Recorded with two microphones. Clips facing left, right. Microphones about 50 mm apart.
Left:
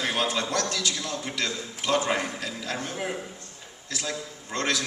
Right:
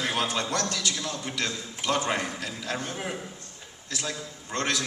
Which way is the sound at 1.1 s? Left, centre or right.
Centre.